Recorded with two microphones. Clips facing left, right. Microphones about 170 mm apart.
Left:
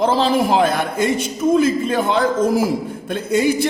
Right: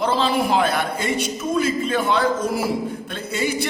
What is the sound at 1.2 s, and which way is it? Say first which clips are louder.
Speech: left 8 dB; 50° left (ahead or behind).